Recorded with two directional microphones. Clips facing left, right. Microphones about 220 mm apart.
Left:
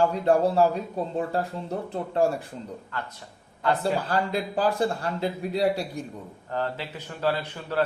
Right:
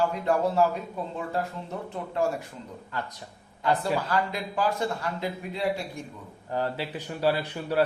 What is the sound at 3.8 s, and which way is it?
Speech, 30° left (ahead or behind).